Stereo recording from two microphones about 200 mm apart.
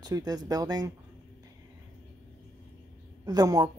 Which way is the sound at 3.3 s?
20° right (ahead or behind).